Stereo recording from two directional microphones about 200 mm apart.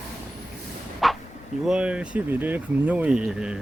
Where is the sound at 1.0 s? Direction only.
Centre (ahead or behind).